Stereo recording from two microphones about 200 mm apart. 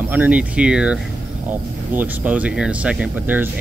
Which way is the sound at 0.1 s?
5° right (ahead or behind).